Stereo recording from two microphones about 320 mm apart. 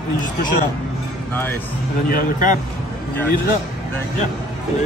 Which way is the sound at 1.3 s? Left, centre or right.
Centre.